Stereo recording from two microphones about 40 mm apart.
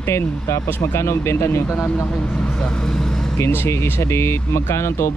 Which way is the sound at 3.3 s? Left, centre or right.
Left.